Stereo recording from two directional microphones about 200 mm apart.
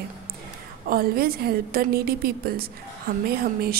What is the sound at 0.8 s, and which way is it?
A woman's voice, 45° right (ahead or behind).